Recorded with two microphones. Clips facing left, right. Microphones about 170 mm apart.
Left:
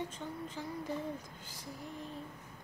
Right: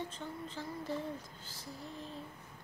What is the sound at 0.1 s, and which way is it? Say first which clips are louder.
Female singing: left 1 dB; 10° left (ahead or behind).